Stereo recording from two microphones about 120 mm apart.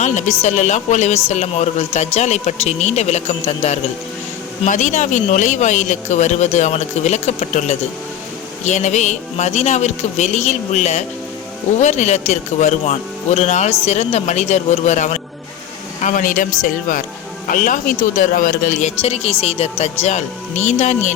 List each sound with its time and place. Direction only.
0.0 s a woman's voice: 80° left
4.6 s a woman's voice: 90° left
18.2 s speech: 90° left; by 19.7 s 55° left (ahead or behind)
19.8 s speech: 70° left (ahead or behind)